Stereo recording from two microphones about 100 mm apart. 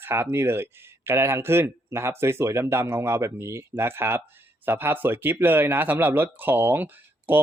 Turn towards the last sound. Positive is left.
turn(degrees=-20)  # may be behind; listen again after turning